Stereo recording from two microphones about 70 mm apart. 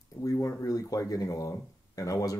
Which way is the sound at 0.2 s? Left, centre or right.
Left.